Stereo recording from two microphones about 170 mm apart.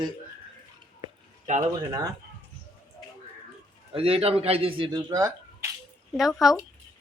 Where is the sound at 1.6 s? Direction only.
20° right (ahead or behind).